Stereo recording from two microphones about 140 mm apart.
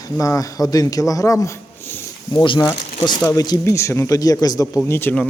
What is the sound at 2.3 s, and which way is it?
Speech, 35° left (ahead or behind).